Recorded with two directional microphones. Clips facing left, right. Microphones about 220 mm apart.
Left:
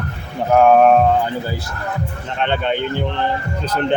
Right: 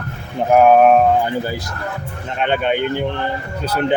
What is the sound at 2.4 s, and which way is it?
Speech, 15° right (ahead or behind).